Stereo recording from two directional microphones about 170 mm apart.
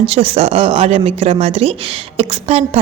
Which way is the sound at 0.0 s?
35° right (ahead or behind).